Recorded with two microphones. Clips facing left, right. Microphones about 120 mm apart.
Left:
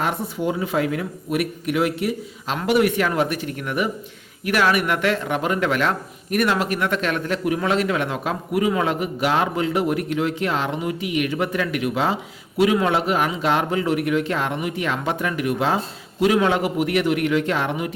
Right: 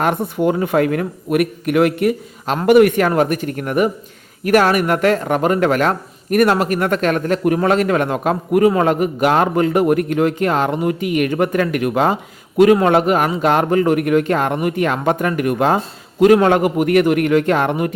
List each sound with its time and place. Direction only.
0.0 s a man's voice: 55° right (ahead or behind)